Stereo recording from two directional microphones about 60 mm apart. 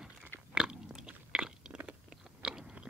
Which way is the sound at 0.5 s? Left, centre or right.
Centre.